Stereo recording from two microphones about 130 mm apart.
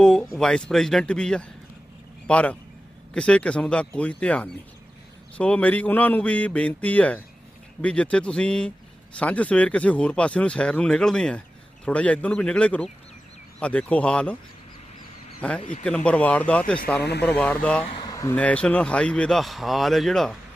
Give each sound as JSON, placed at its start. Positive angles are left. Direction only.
{"t": 0.0, "sound": "speech", "side_deg": 5}
{"t": 15.4, "sound": "speech", "side_deg": 10}
{"t": 17.8, "sound": "speech", "side_deg": 45}
{"t": 18.1, "sound": "a sound", "side_deg": 25}
{"t": 18.3, "sound": "speech", "side_deg": 10}